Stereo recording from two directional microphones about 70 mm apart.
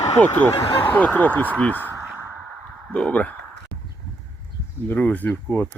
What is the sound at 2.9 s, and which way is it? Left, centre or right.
Speech, centre.